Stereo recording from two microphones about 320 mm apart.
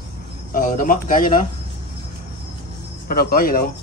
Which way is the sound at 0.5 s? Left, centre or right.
Left.